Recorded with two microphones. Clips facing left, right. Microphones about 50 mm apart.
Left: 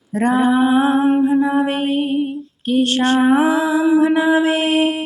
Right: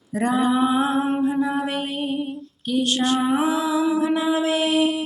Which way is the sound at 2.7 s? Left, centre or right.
Left.